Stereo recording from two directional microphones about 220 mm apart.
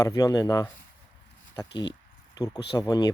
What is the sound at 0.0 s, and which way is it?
Speech, 15° left (ahead or behind).